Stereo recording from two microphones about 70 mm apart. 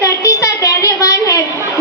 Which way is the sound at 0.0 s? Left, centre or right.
Left.